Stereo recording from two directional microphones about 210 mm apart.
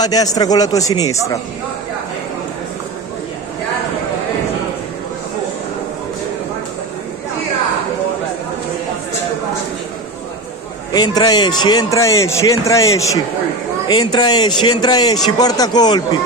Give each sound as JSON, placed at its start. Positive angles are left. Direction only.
{"t": 0.0, "sound": "speech", "side_deg": 15}
{"t": 10.9, "sound": "speech", "side_deg": 20}